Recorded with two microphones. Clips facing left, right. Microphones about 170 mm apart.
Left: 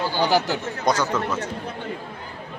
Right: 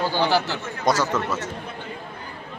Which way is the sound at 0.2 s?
15° left (ahead or behind).